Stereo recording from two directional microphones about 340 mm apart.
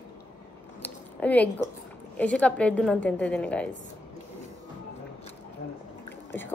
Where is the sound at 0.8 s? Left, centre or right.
Centre.